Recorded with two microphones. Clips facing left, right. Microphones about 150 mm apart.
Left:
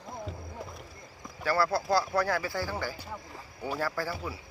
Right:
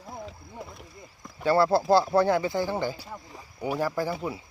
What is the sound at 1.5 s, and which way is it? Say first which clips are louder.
Speech: right 6 dB; 25° right (ahead or behind).